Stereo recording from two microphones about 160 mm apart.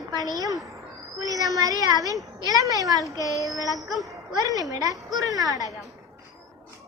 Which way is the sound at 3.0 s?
20° left (ahead or behind).